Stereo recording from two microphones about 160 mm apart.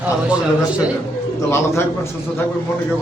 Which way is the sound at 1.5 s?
15° left (ahead or behind).